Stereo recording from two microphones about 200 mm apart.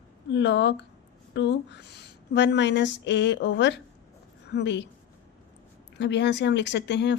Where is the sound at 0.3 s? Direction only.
65° left (ahead or behind).